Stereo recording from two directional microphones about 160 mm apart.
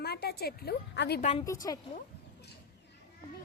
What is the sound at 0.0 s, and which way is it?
A woman's voice, 85° left.